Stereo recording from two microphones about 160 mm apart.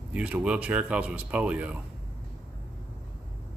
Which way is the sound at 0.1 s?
10° right (ahead or behind).